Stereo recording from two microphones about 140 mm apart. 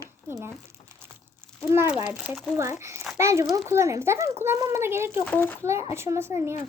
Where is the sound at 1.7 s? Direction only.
15° right (ahead or behind).